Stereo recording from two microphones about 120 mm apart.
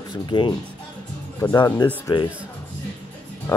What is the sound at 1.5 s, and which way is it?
Speech, 35° left (ahead or behind).